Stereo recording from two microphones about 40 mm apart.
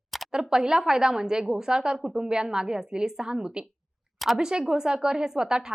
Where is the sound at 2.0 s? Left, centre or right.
Centre.